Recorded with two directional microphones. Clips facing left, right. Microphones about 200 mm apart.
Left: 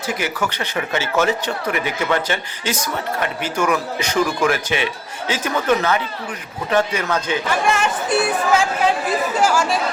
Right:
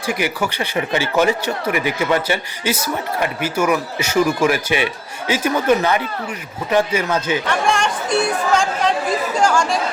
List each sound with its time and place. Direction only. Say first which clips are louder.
0.1 s speech: right 3 dB; 10° right (ahead or behind)
7.4 s speech: even; 5° left (ahead or behind)